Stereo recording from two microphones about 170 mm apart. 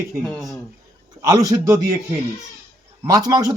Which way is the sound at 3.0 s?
20° right (ahead or behind).